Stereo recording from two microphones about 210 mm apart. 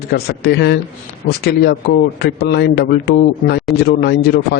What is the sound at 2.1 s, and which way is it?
A man's voice, 50° left (ahead or behind).